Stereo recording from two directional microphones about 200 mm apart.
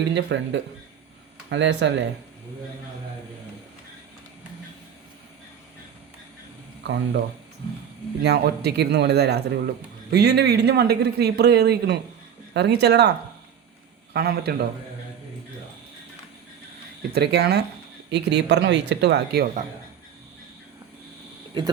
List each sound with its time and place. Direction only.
0.1 s speech: 60° right (ahead or behind)
6.8 s speech: 60° right (ahead or behind)
8.2 s a man's voice: 55° right (ahead or behind)
17.2 s speech: 55° right (ahead or behind)